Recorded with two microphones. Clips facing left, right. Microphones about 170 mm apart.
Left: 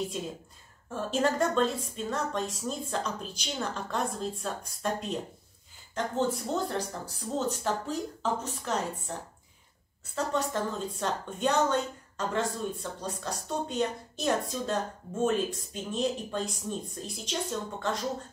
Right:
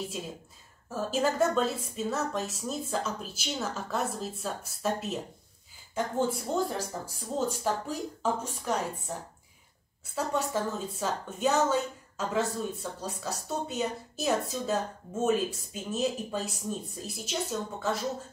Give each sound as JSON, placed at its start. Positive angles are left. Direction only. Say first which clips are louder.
{"t": 0.8, "sound": "a woman's voice", "louder": "even", "side_deg": -5}
{"t": 10.1, "sound": "a woman's voice", "louder": "even", "side_deg": -10}